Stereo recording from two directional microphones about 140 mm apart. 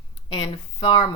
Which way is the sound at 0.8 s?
40° left (ahead or behind).